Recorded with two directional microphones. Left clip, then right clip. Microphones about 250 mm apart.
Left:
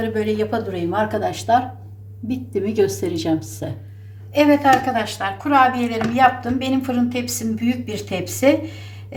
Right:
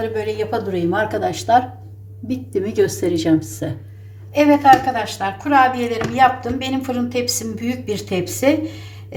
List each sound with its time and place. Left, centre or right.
0.0 s a woman's voice: centre